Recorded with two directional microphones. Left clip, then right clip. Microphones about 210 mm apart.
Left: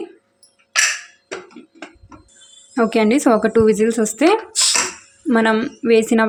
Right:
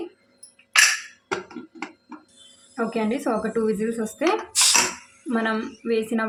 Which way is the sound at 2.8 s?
50° left (ahead or behind).